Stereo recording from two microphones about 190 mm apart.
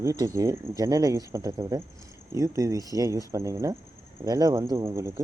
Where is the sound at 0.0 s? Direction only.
15° right (ahead or behind).